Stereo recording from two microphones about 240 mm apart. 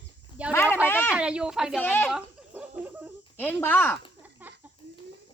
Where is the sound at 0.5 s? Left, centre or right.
Centre.